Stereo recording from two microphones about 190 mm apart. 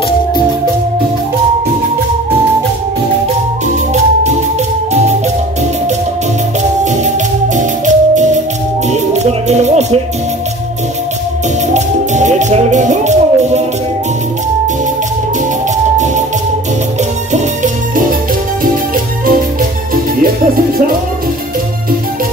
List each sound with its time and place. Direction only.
7.5 s music: 40° right (ahead or behind)
11.7 s music: 40° right (ahead or behind)
20.2 s music: 50° right (ahead or behind)